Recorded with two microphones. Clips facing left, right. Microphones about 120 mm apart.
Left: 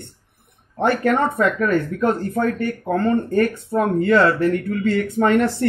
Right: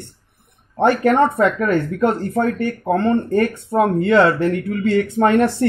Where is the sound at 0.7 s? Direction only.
25° right (ahead or behind).